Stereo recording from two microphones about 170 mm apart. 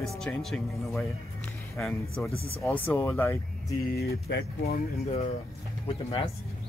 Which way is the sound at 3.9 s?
70° left (ahead or behind).